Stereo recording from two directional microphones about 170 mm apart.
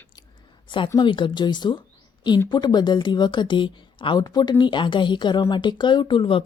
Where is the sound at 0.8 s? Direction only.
25° left (ahead or behind).